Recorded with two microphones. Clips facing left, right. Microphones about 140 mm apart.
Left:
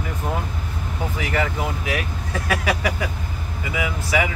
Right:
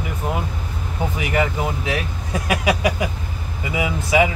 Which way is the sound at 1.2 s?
20° right (ahead or behind).